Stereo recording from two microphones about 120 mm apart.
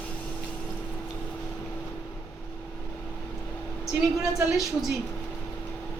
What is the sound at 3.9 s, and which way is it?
A woman's voice, 5° right (ahead or behind).